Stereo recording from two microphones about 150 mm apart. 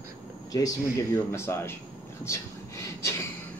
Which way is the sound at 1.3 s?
15° left (ahead or behind).